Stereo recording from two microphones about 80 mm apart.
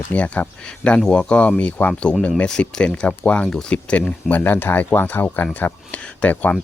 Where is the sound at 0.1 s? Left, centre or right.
Centre.